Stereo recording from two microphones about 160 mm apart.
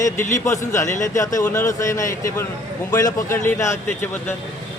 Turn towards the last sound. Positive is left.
turn(degrees=15)  # may be behind; listen again after turning